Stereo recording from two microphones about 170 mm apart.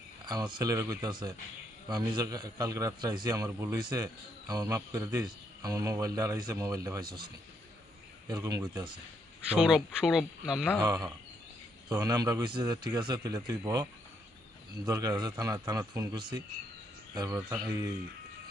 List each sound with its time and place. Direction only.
0.3 s a man's voice: 25° right (ahead or behind)
8.3 s a man's voice: 20° right (ahead or behind)
9.5 s speech: 5° right (ahead or behind)
10.8 s a man's voice: 20° right (ahead or behind)
14.8 s a man's voice: 20° right (ahead or behind)